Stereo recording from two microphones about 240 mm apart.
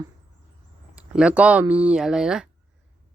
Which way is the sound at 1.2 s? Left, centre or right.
Centre.